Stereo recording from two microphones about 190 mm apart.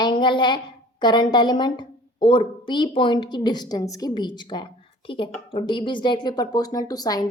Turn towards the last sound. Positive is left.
turn(degrees=20)  # may be behind; listen again after turning